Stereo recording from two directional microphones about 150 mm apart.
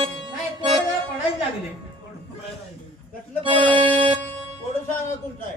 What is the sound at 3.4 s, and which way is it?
Music, 40° right (ahead or behind).